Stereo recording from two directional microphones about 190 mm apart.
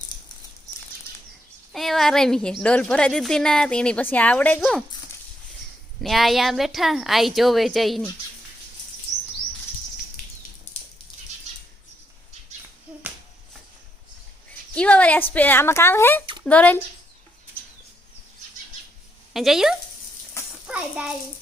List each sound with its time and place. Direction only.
1.7 s a woman's voice: centre (ahead or behind)
6.0 s a woman's voice: centre (ahead or behind)
14.8 s a sound: 5° left (ahead or behind)
15.3 s a woman's voice: 10° left (ahead or behind)
19.3 s a child's voice: centre (ahead or behind)